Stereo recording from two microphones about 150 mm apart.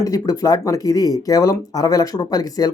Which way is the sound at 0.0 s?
25° left (ahead or behind).